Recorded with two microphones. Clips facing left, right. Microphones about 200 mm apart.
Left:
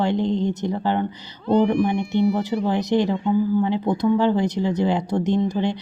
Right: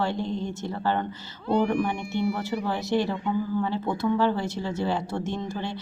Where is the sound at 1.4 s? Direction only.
10° right (ahead or behind).